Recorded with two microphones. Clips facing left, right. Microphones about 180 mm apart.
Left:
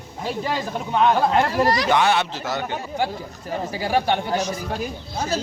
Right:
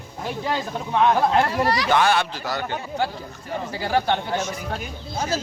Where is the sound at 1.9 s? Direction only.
20° left (ahead or behind).